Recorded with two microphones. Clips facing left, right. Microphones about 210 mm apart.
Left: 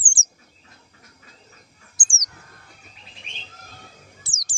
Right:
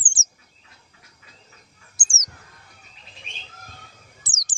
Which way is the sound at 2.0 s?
45° right (ahead or behind).